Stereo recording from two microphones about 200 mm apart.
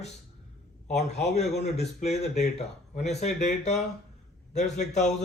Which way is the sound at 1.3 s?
35° left (ahead or behind).